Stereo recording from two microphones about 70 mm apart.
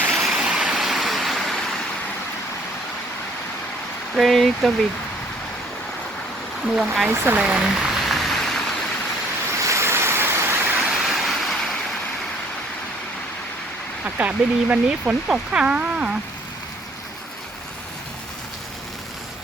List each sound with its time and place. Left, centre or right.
0.1 s vehicle: centre
4.1 s speech: centre
6.7 s speech: centre
7.3 s a sound: centre
9.6 s vehicle: right
10.8 s vehicle: centre
14.2 s speech: right